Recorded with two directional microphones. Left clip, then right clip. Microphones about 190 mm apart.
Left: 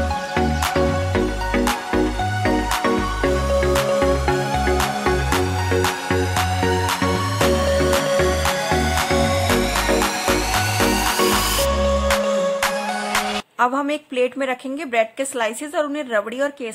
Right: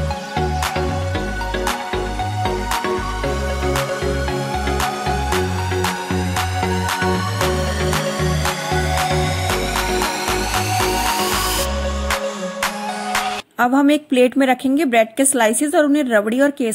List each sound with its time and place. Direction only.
13.6 s a woman's voice: 20° right (ahead or behind)